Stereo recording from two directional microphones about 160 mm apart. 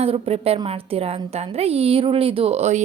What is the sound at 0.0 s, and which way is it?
A woman's voice, 40° right (ahead or behind).